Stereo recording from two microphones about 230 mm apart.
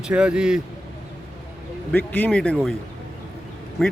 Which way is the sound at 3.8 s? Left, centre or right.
Centre.